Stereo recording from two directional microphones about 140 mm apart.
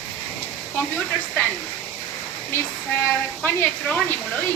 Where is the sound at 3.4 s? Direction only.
10° left (ahead or behind).